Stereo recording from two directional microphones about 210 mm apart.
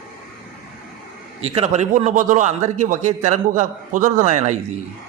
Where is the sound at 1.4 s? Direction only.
30° right (ahead or behind).